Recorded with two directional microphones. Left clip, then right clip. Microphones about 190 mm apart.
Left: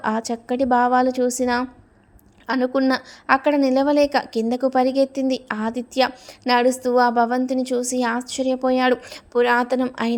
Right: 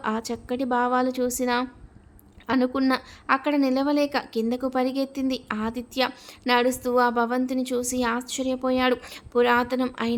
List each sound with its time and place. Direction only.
0.0 s a woman's voice: 20° left (ahead or behind)